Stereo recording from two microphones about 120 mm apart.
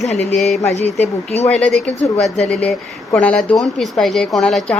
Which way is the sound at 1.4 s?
5° left (ahead or behind).